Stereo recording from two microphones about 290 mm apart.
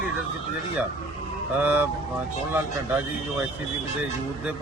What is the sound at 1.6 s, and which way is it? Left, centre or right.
Speech, centre.